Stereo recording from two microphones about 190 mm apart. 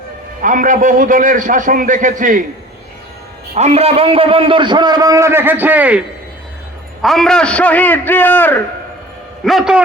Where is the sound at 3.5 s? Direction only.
35° right (ahead or behind); by 6.0 s 10° right (ahead or behind).